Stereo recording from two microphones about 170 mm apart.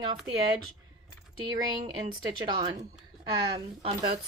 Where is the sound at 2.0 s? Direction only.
25° right (ahead or behind).